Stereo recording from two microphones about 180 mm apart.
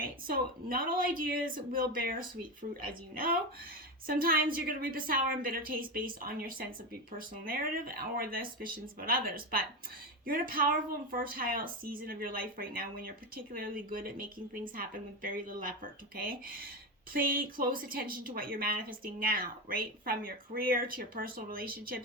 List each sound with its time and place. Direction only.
0.0 s speech: 55° right (ahead or behind)